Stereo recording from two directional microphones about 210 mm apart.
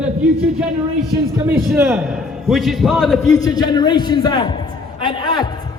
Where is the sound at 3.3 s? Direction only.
20° left (ahead or behind).